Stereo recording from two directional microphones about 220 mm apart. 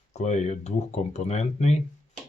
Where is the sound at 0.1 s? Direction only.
30° left (ahead or behind).